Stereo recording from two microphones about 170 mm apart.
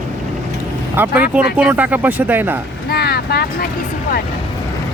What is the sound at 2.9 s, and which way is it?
Speech, 70° left (ahead or behind).